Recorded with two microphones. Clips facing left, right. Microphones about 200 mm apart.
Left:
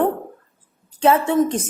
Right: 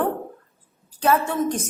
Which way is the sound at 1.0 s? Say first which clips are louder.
Left 5 dB; 20° left (ahead or behind).